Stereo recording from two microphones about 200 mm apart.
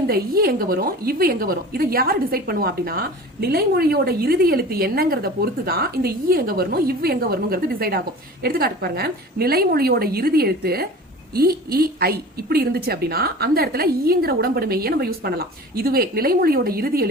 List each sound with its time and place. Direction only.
0.1 s a woman's voice: 50° right (ahead or behind)